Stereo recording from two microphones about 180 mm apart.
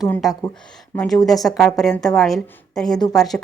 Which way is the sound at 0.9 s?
10° left (ahead or behind).